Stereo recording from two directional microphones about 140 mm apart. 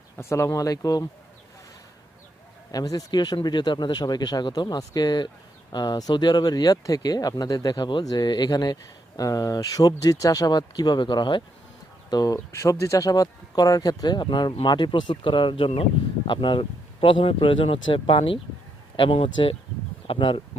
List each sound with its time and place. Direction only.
0.2 s speech: 20° left (ahead or behind)
2.7 s speech: 25° left (ahead or behind)